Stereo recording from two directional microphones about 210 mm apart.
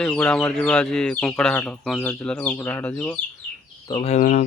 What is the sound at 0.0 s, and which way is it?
Speech, 5° left (ahead or behind).